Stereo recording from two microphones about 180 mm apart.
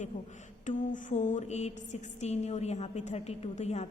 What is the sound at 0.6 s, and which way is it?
A woman's voice, 40° left (ahead or behind).